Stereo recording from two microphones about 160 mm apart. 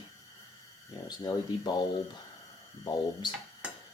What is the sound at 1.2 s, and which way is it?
Speech, 25° left (ahead or behind).